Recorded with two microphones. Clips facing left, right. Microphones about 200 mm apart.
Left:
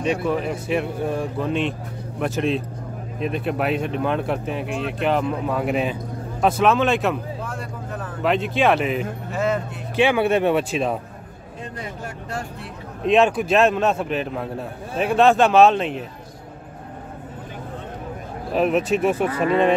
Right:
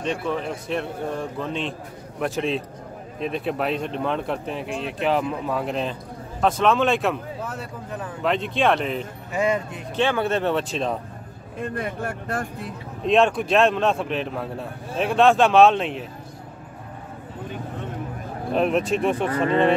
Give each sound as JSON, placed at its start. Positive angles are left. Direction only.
{"t": 0.0, "sound": "a man's voice", "side_deg": 10}
{"t": 8.2, "sound": "a man's voice", "side_deg": 5}
{"t": 11.6, "sound": "speech", "side_deg": -55}
{"t": 13.0, "sound": "a man's voice", "side_deg": 5}
{"t": 18.5, "sound": "a man's voice", "side_deg": 5}